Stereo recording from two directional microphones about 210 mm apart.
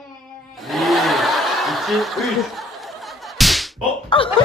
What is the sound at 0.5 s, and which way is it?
Snicker, centre (ahead or behind).